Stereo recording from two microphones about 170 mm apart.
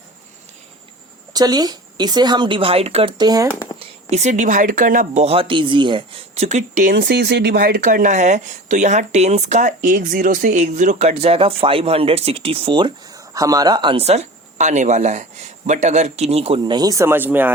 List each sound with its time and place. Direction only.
1.3 s a woman's voice: 25° right (ahead or behind)
3.8 s speech: 40° right (ahead or behind)
6.9 s speech: 75° right (ahead or behind); by 17.5 s 10° right (ahead or behind)